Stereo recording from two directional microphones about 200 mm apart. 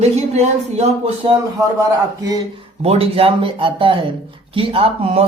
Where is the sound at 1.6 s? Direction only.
15° right (ahead or behind).